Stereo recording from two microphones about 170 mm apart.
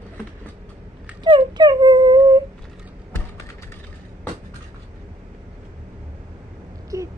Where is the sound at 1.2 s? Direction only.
25° right (ahead or behind).